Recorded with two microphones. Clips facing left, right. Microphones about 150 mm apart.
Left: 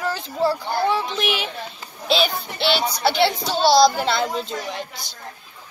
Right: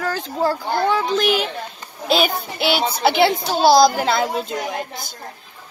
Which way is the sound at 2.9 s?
55° right (ahead or behind).